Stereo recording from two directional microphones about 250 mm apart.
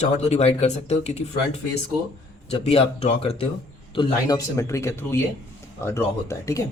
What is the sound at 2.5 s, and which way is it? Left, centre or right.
Speech, left.